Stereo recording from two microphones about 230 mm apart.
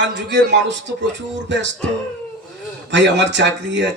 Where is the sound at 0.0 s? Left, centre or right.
Right.